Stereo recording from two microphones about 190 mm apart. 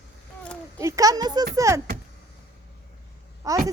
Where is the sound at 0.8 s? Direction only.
15° right (ahead or behind).